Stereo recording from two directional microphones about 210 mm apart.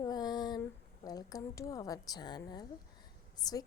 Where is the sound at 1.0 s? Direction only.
15° left (ahead or behind).